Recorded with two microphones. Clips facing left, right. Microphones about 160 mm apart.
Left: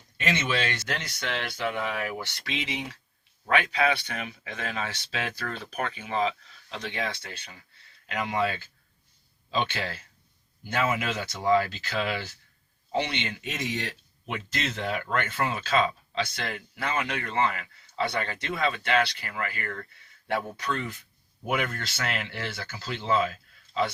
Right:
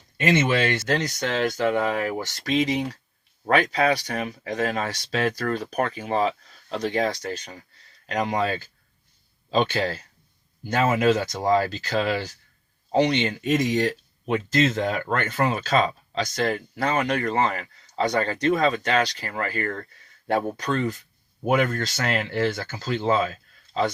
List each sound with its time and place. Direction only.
0.2 s speech: 50° right (ahead or behind)